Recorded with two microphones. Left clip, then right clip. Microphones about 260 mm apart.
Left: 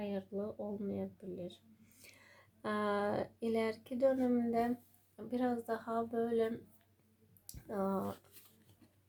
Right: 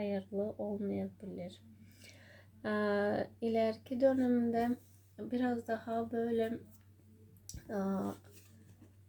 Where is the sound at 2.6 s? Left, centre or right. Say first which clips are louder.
Right 2 dB; left.